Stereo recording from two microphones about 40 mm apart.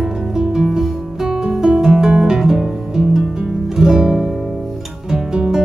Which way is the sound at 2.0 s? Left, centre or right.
Centre.